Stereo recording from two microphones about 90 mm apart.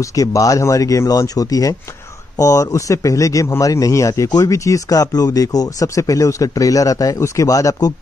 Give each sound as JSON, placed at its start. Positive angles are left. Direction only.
{"t": 0.0, "sound": "speech", "side_deg": 40}